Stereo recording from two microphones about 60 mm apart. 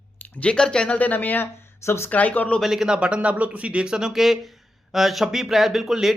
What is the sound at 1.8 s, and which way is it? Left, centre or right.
Speech, left.